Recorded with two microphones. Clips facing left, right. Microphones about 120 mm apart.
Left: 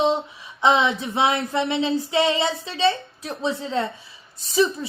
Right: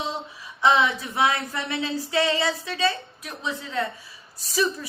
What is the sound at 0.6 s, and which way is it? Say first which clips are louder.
Speech: left 2 dB; 20° left (ahead or behind).